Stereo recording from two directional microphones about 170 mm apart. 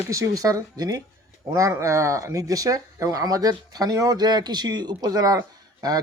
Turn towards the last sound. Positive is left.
turn(degrees=-25)  # may be behind; listen again after turning